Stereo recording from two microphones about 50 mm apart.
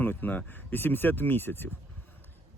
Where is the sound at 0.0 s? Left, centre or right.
Left.